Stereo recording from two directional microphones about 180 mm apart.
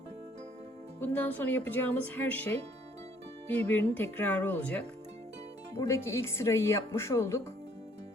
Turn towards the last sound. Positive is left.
turn(degrees=15)  # may be behind; listen again after turning